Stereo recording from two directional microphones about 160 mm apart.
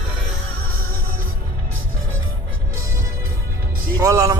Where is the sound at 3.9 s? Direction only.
20° right (ahead or behind).